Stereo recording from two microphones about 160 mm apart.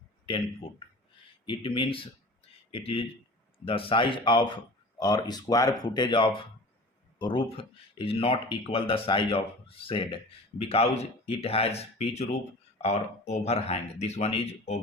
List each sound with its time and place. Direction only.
0.3 s speech: 35° left (ahead or behind)